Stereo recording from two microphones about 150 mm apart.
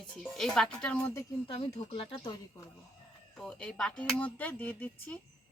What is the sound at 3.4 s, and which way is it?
Speech, 5° left (ahead or behind).